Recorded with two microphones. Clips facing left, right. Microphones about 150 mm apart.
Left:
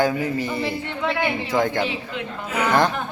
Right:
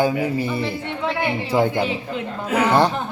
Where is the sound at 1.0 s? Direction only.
Centre (ahead or behind).